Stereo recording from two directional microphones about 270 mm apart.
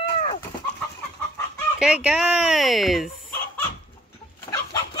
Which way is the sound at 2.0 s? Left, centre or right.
Centre.